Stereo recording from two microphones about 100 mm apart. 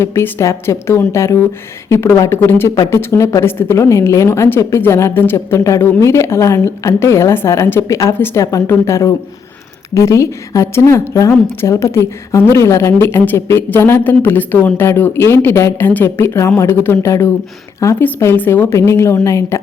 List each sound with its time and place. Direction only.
0.0 s a woman's voice: 25° left (ahead or behind)